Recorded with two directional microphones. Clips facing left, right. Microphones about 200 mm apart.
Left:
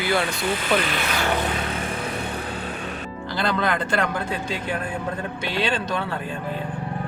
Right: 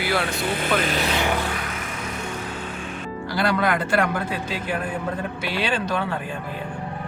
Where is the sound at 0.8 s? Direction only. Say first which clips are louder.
Right 3 dB; 40° right (ahead or behind).